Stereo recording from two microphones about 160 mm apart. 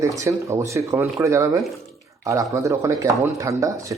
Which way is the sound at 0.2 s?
20° right (ahead or behind).